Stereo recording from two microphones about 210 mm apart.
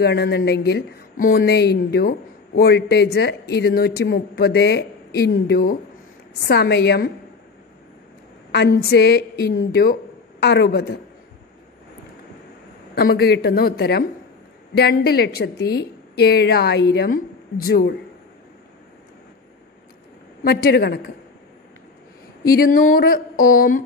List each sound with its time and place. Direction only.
0.0 s speech: 50° left (ahead or behind)
8.5 s speech: 50° left (ahead or behind)
12.9 s speech: 50° left (ahead or behind)
20.4 s speech: 50° left (ahead or behind)
22.5 s a sound: 45° left (ahead or behind)